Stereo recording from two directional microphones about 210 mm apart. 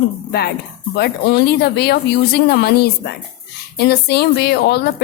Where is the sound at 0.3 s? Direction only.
50° left (ahead or behind).